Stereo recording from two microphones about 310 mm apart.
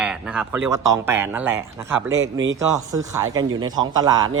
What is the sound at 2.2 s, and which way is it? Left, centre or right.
Speech, right.